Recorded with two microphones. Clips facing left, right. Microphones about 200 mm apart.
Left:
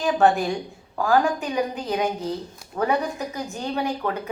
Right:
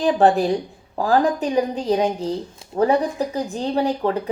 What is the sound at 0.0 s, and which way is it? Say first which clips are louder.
A woman's voice: right 3 dB; 35° right (ahead or behind).